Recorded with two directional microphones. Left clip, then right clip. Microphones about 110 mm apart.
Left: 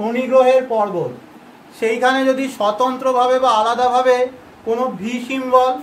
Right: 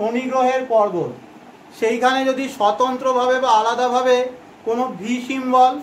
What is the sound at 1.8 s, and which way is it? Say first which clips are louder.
Speech: left 1 dB; 20° right (ahead or behind).